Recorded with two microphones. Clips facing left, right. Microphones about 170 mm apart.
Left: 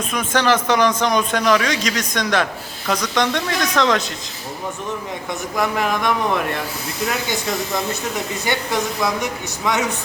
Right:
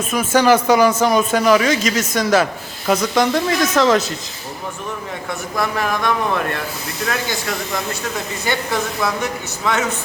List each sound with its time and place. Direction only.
0.1 s a man's voice: 5° right (ahead or behind)
5.5 s speech: 15° left (ahead or behind)